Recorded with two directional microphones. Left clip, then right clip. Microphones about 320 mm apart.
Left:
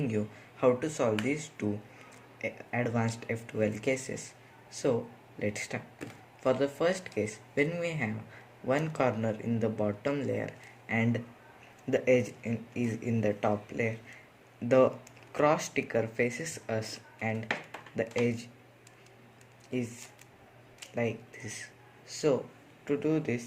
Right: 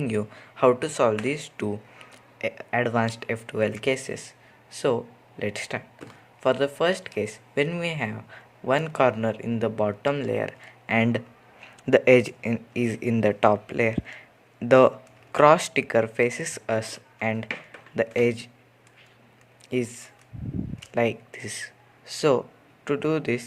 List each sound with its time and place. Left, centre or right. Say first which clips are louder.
0.0 s speech: right 6 dB; right
20.9 s speech: right 9 dB; right